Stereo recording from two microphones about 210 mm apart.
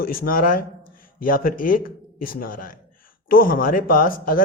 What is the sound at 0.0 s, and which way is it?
Speech, 45° left (ahead or behind).